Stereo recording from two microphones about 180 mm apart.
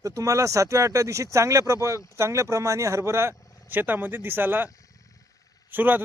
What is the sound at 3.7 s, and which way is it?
Speech, 10° right (ahead or behind).